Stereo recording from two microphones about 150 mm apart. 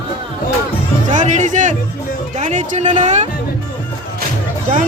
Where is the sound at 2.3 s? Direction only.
50° right (ahead or behind).